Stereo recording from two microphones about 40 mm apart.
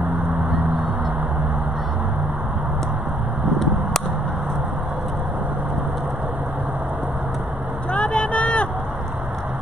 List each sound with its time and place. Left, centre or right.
7.9 s vehicle: left